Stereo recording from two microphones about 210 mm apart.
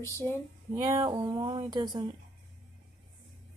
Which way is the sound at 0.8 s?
25° right (ahead or behind).